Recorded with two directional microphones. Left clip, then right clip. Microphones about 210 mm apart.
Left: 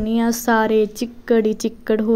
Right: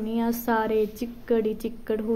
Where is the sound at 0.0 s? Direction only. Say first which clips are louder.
Left 7 dB; 40° left (ahead or behind).